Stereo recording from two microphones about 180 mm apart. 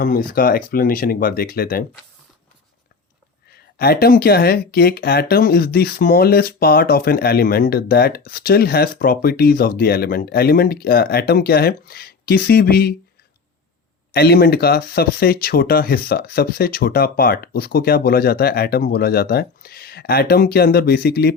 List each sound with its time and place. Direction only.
0.0 s speech: 55° left (ahead or behind)
3.8 s speech: 60° left (ahead or behind)
14.1 s speech: 60° left (ahead or behind)